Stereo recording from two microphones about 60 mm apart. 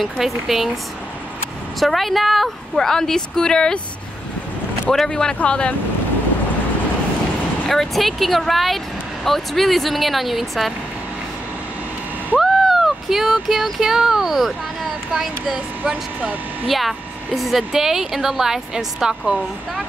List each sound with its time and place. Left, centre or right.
0.0 s speech: centre
1.8 s a woman's voice: centre
4.9 s a woman's voice: centre
7.6 s speech: centre
12.4 s speech: centre
15.5 s speech: right
16.6 s speech: centre